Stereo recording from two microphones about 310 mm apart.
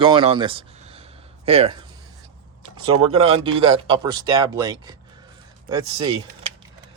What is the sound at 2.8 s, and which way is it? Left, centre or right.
Speech, centre.